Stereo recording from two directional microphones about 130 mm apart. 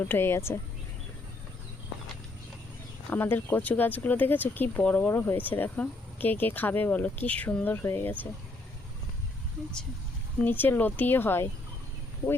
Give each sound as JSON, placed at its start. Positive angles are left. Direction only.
{"t": 0.0, "sound": "speech", "side_deg": 20}
{"t": 3.1, "sound": "speech", "side_deg": 15}
{"t": 10.4, "sound": "speech", "side_deg": 15}